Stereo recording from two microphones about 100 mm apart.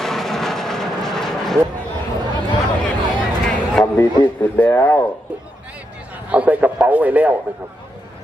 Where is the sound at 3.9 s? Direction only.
15° left (ahead or behind).